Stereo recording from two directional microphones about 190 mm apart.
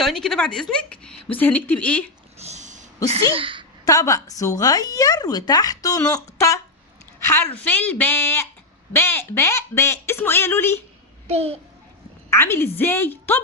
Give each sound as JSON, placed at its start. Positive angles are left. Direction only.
{"t": 0.0, "sound": "a woman's voice", "side_deg": 0}
{"t": 2.4, "sound": "a sound", "side_deg": -35}
{"t": 3.3, "sound": "a woman's voice", "side_deg": -25}
{"t": 3.8, "sound": "speech", "side_deg": 15}
{"t": 11.3, "sound": "a child's voice", "side_deg": -35}
{"t": 12.3, "sound": "speech", "side_deg": 15}